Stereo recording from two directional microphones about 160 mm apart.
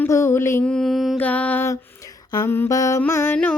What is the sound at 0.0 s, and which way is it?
Mantra, 15° left (ahead or behind).